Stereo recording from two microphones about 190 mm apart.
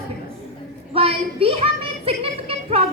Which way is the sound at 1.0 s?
30° right (ahead or behind).